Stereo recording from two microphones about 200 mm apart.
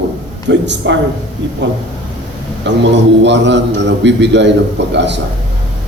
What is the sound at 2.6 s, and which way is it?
A man's voice, 60° right (ahead or behind).